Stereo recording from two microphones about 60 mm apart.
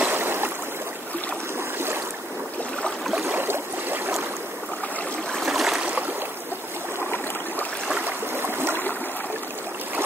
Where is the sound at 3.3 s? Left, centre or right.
Right.